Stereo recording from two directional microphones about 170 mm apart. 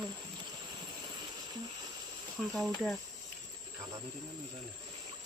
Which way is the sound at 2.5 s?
Centre (ahead or behind).